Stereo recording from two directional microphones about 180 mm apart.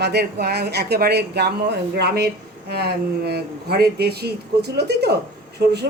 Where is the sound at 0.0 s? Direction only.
65° right (ahead or behind).